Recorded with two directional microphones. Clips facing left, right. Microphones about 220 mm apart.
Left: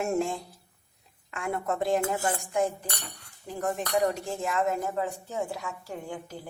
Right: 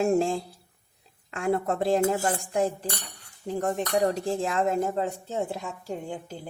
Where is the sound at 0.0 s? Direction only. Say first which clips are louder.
Right 5 dB; 30° right (ahead or behind).